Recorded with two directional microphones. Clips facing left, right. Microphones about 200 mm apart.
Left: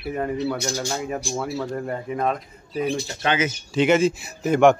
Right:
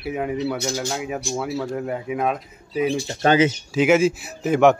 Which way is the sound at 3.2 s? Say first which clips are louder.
Right 7 dB; 35° right (ahead or behind).